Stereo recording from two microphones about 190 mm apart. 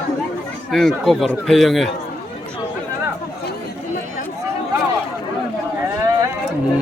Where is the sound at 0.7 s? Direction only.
Centre (ahead or behind).